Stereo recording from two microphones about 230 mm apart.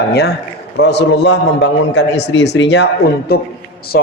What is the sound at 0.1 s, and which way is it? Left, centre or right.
A man's voice, left.